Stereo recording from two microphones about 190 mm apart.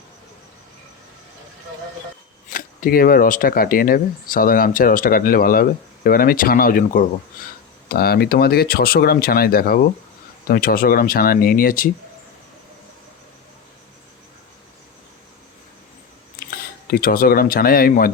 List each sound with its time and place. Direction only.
2.5 s speech: 50° left (ahead or behind)
16.4 s speech: 55° left (ahead or behind)